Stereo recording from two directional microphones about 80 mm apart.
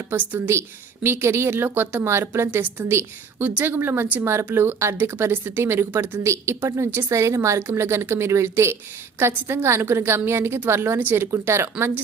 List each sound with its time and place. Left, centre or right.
0.1 s a woman's voice: right